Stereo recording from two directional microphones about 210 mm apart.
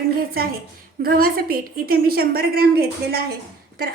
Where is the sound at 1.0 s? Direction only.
45° right (ahead or behind).